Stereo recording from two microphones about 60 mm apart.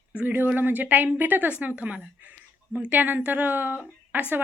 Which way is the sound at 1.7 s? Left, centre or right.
Right.